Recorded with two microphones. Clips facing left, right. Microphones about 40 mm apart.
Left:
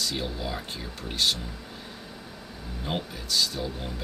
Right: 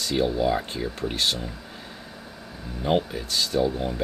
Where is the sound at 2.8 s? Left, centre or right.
Centre.